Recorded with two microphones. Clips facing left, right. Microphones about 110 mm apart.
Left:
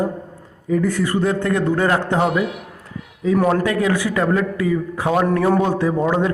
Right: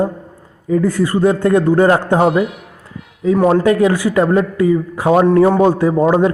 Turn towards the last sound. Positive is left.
turn(degrees=-35)  # may be behind; listen again after turning